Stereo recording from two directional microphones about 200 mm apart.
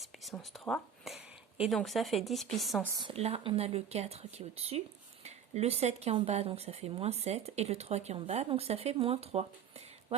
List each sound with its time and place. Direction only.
0.0 s speech: centre (ahead or behind)
2.9 s speech: 25° right (ahead or behind)